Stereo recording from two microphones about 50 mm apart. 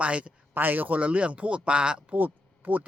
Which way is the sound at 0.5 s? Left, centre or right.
Right.